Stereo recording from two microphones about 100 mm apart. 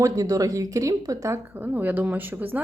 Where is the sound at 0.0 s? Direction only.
35° right (ahead or behind).